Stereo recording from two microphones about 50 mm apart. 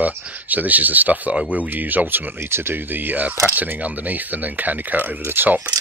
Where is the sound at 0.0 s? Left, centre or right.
Right.